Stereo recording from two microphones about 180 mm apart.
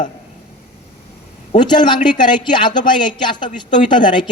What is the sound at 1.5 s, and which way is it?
A woman's voice, 25° left (ahead or behind).